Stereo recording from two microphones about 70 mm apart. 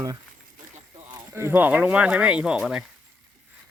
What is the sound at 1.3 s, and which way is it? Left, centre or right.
Speech, right.